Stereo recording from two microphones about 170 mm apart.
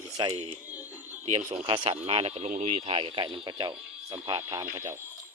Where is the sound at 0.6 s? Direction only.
10° right (ahead or behind).